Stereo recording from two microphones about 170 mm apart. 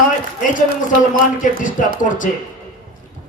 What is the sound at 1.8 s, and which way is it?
Speech, 50° left (ahead or behind).